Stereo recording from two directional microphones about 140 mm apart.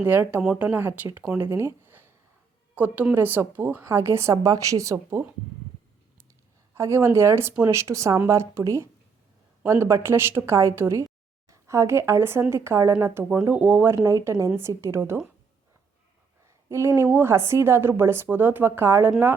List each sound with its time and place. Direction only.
0.0 s a woman's voice: 10° right (ahead or behind)
6.7 s a woman's voice: 20° right (ahead or behind)
13.9 s a woman's voice: 25° right (ahead or behind)
16.6 s speech: 20° right (ahead or behind)